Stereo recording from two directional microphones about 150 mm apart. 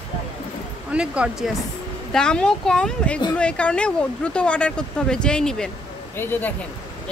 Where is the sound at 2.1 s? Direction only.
5° left (ahead or behind).